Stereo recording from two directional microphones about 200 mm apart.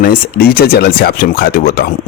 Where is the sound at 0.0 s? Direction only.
45° left (ahead or behind).